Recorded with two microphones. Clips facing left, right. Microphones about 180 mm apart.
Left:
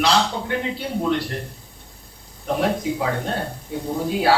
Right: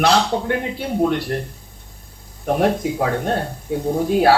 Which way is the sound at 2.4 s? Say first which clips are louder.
Right 4 dB; 50° right (ahead or behind).